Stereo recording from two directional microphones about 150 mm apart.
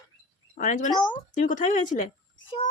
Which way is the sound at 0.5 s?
60° left (ahead or behind).